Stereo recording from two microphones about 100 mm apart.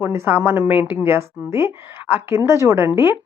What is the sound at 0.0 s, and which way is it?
A woman's voice, 25° right (ahead or behind).